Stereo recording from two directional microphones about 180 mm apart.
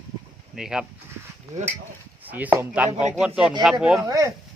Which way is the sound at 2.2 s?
10° right (ahead or behind).